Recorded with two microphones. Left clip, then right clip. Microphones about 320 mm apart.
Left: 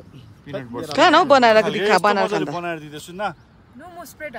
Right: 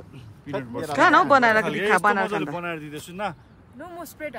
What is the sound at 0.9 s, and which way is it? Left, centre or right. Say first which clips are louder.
Speech: left 3 dB; centre.